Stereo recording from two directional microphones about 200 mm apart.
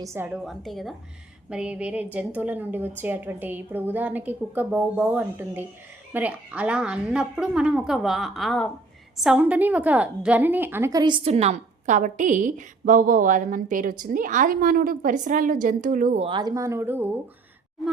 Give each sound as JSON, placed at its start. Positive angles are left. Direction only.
{"t": 0.0, "sound": "a woman's voice", "side_deg": -10}